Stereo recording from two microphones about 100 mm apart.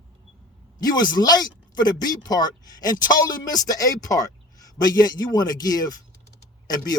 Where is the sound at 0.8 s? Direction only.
40° left (ahead or behind).